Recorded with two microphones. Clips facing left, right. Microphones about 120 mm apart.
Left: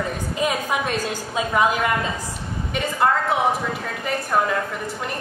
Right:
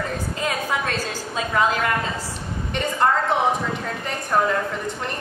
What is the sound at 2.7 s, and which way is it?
Speech, 5° left (ahead or behind).